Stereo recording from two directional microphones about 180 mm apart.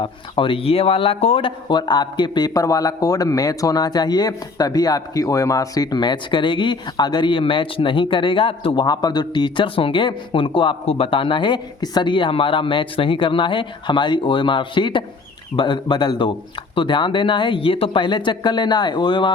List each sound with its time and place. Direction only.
0.0 s speech: 30° left (ahead or behind)